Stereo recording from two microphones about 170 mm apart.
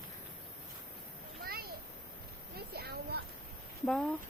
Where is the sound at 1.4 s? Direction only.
65° right (ahead or behind).